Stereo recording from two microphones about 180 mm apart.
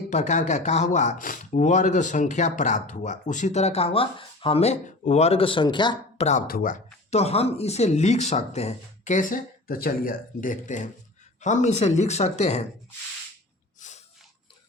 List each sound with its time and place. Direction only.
0.1 s speech: 40° left (ahead or behind); by 6.2 s 25° left (ahead or behind)
6.2 s speech: 45° left (ahead or behind)
7.1 s speech: 35° left (ahead or behind)
13.7 s snort: 40° left (ahead or behind)